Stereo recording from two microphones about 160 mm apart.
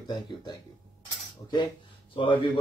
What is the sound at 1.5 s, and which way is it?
Speech, 30° left (ahead or behind).